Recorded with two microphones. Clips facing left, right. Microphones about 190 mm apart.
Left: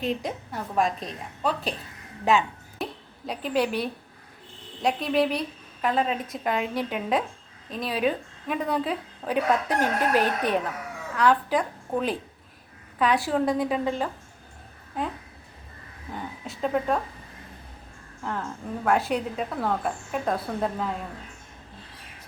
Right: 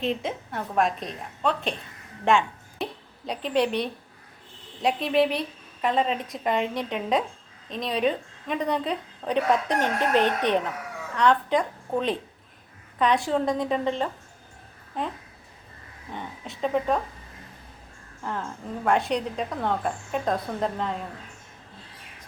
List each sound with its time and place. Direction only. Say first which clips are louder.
0.0 s a woman's voice: right 1 dB; centre (ahead or behind)
16.1 s a woman's voice: left 1 dB; centre (ahead or behind)
18.2 s a woman's voice: even; centre (ahead or behind)